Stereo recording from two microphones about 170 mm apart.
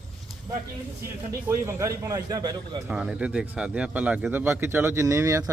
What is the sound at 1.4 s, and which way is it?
A man's voice, 15° right (ahead or behind).